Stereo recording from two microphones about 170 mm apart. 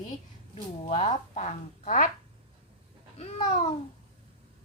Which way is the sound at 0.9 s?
35° left (ahead or behind).